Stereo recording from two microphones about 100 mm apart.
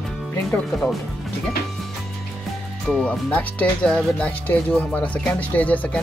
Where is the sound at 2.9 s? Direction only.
10° left (ahead or behind).